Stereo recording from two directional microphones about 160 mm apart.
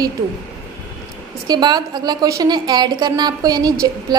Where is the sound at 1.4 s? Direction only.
25° right (ahead or behind).